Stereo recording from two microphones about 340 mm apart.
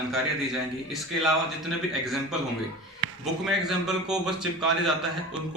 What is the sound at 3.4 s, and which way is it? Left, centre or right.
A man's voice, centre.